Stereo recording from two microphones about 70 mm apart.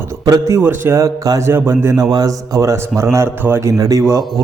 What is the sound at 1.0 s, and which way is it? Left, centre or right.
Speech, right.